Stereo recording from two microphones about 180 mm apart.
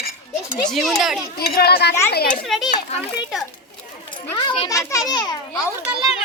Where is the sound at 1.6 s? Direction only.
60° left (ahead or behind).